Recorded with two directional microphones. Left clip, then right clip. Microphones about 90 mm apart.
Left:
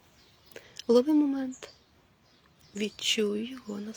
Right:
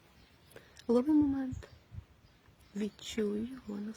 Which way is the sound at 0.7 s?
35° right (ahead or behind).